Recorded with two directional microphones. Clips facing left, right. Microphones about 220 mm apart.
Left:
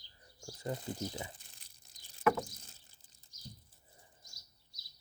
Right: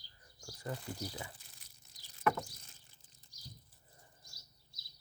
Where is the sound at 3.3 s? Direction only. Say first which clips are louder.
Left 5 dB; 35° right (ahead or behind).